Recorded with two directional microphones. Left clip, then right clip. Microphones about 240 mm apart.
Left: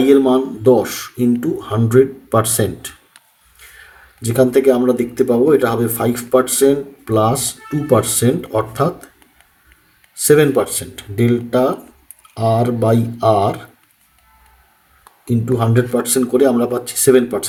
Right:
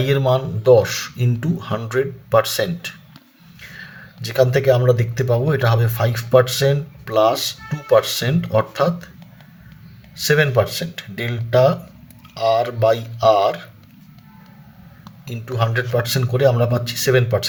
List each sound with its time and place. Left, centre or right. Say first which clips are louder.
0.0 s speech: left 6 dB; right
4.4 s speech: left 3 dB; right
10.2 s speech: left 4 dB; right
15.5 s speech: left 2 dB; right